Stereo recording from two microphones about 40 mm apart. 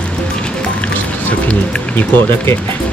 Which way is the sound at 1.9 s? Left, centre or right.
Left.